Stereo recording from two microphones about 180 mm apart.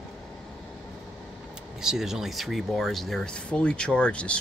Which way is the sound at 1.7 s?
Centre (ahead or behind).